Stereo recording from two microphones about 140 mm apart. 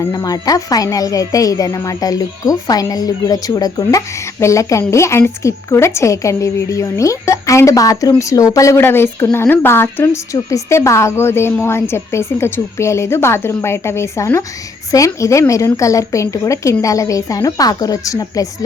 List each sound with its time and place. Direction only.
0.1 s a woman's voice: 25° left (ahead or behind)